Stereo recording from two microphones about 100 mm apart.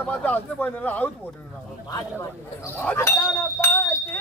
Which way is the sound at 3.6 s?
25° left (ahead or behind).